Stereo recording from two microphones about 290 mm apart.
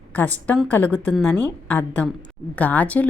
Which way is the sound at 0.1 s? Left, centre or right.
Centre.